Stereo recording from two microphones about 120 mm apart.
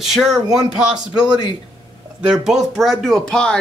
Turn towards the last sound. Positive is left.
turn(degrees=5)  # may be behind; listen again after turning